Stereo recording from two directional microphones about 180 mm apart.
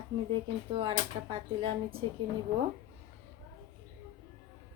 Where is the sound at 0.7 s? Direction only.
30° right (ahead or behind).